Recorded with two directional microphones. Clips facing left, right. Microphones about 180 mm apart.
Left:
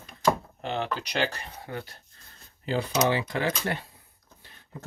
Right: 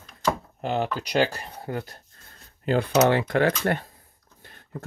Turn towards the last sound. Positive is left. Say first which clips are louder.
# right 6 dB
turn(degrees=-55)  # may be behind; listen again after turning